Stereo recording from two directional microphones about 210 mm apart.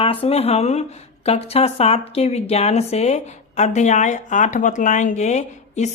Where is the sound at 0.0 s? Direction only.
25° left (ahead or behind).